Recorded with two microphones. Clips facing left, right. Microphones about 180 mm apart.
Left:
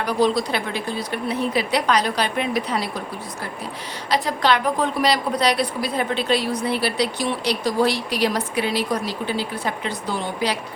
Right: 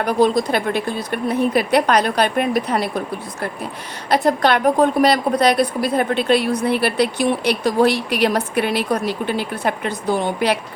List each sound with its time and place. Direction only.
0.0 s a woman's voice: 50° right (ahead or behind)
4.1 s a woman's voice: 55° right (ahead or behind)